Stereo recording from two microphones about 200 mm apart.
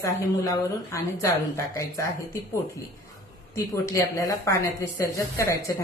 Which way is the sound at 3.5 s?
15° left (ahead or behind).